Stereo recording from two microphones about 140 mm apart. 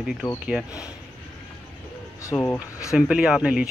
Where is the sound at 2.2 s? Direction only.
15° left (ahead or behind).